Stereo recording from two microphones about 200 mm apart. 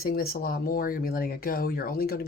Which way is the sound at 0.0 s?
50° left (ahead or behind).